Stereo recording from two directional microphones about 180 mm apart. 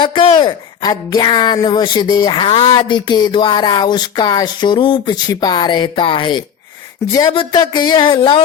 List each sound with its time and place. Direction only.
0.0 s speech: 25° left (ahead or behind)